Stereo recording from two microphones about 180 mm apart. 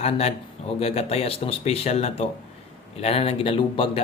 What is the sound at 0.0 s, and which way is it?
Speech, 35° left (ahead or behind).